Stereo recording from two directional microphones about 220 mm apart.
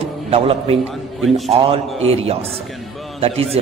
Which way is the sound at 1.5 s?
25° right (ahead or behind).